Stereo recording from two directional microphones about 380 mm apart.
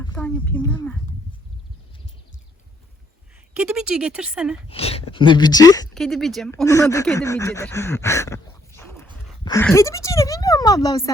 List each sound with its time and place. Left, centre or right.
0.0 s speech: centre
3.5 s speech: centre
4.7 s a sound: centre
5.1 s speech: centre